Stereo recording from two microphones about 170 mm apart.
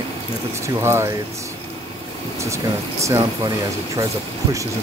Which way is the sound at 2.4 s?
15° right (ahead or behind).